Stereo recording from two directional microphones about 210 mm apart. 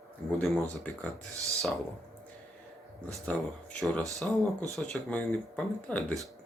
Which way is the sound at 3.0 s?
5° left (ahead or behind).